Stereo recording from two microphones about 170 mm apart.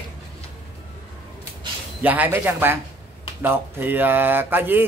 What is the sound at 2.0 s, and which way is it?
Speech, 10° right (ahead or behind).